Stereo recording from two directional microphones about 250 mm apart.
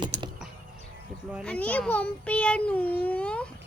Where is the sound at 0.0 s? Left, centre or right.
Centre.